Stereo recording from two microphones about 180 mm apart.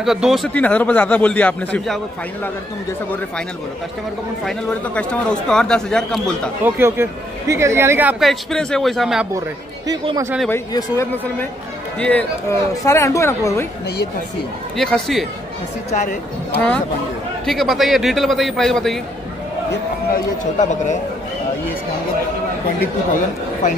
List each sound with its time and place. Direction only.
0.0 s a man's voice: centre (ahead or behind)
4.5 s speech: 5° left (ahead or behind)
6.6 s speech: 15° right (ahead or behind)
8.3 s speech: 5° left (ahead or behind)
10.5 s a man's voice: 15° left (ahead or behind)
14.8 s speech: centre (ahead or behind)
15.9 s speech: 40° left (ahead or behind)
16.5 s a man's voice: 5° left (ahead or behind)
20.5 s speech: 40° left (ahead or behind)